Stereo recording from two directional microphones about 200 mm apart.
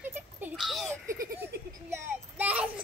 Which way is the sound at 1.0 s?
15° right (ahead or behind).